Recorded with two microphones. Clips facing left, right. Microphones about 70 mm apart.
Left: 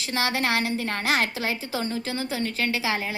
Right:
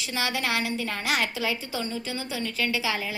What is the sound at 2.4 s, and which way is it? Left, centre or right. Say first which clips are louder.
Speech: right 1 dB; left.